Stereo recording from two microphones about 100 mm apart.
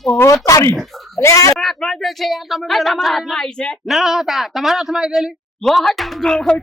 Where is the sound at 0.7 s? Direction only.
Centre (ahead or behind).